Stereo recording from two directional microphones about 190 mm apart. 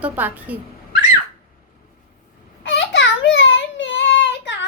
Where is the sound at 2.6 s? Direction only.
70° left (ahead or behind).